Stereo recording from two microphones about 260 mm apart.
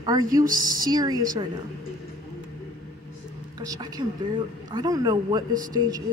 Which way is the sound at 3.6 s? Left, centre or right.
Centre.